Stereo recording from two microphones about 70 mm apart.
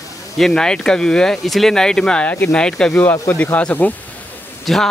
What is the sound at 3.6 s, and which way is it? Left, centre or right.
Speech, left.